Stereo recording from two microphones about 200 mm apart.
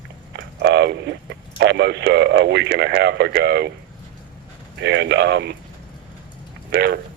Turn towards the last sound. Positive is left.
turn(degrees=-55)  # may be behind; listen again after turning